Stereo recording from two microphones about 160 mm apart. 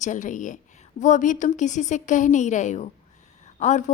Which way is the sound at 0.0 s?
50° left (ahead or behind).